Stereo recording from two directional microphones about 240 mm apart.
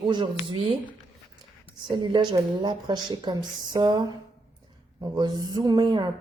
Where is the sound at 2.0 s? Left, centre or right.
Centre.